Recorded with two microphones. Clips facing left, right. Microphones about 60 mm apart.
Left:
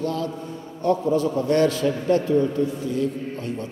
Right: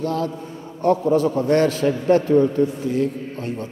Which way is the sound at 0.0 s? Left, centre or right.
Right.